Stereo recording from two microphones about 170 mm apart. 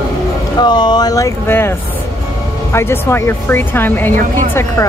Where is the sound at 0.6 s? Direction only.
25° left (ahead or behind).